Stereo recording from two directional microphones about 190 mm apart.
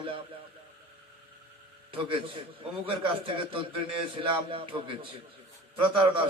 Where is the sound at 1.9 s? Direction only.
25° right (ahead or behind).